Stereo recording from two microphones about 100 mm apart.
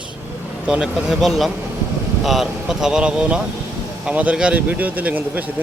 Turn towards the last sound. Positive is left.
turn(degrees=-15)  # may be behind; listen again after turning